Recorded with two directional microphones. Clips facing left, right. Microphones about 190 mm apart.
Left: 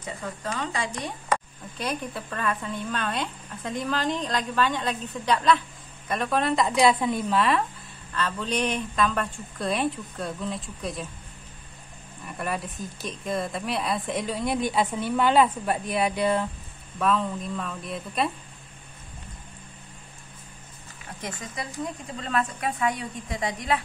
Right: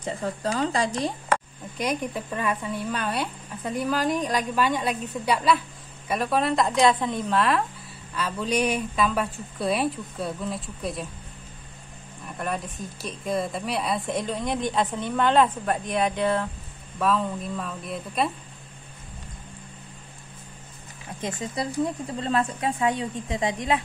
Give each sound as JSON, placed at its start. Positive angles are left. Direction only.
{"t": 0.0, "sound": "speech", "side_deg": -35}
{"t": 1.8, "sound": "a woman's voice", "side_deg": -15}
{"t": 8.1, "sound": "a woman's voice", "side_deg": -10}
{"t": 12.4, "sound": "a woman's voice", "side_deg": 0}
{"t": 17.0, "sound": "a woman's voice", "side_deg": 0}
{"t": 21.2, "sound": "speech", "side_deg": -25}